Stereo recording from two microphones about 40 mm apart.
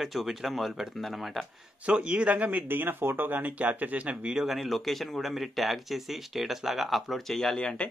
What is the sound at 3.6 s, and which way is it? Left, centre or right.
Speech, right.